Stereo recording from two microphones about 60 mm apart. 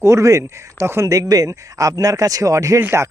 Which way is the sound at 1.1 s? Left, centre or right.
Right.